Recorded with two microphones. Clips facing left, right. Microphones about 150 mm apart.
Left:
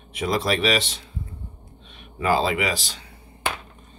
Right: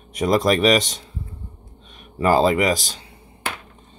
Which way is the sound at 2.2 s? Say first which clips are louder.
Right 5 dB; 40° right (ahead or behind).